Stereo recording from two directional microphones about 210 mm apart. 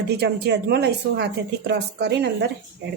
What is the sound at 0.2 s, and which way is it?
Speech, 50° right (ahead or behind).